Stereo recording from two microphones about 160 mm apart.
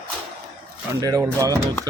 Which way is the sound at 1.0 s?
20° right (ahead or behind).